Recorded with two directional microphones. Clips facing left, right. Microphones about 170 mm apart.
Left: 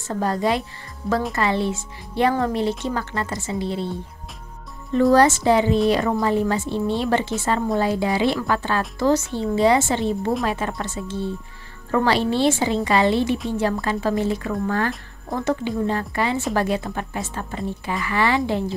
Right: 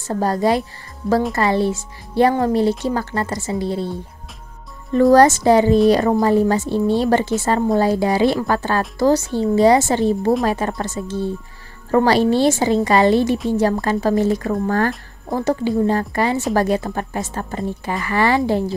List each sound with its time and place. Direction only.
0.1 s speech: 35° right (ahead or behind)
5.1 s a woman's voice: 40° right (ahead or behind)